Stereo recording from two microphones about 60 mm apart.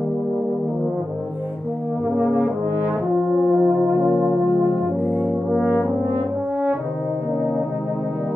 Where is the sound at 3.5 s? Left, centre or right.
Right.